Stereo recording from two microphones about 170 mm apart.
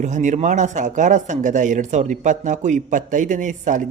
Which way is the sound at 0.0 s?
45° right (ahead or behind).